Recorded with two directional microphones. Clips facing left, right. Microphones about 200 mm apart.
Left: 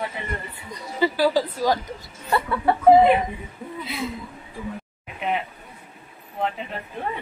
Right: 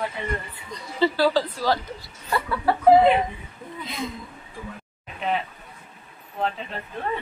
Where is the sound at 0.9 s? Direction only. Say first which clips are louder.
Even; 10° left (ahead or behind).